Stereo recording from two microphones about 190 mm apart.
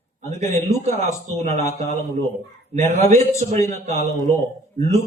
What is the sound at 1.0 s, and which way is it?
Speech, 40° right (ahead or behind).